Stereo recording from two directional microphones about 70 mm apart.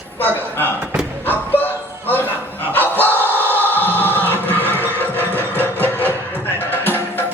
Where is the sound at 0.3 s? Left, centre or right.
Left.